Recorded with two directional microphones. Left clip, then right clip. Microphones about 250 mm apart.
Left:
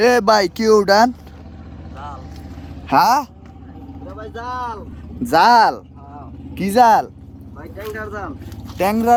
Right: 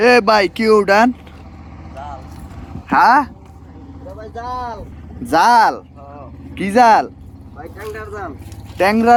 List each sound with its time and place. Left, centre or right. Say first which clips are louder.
0.0 s speech: right 2 dB; left
2.9 s speech: right 2 dB; left
5.3 s speech: even; centre
8.8 s speech: right 4 dB; left